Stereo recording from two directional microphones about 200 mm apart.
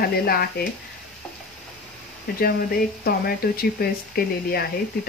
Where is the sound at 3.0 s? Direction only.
50° left (ahead or behind).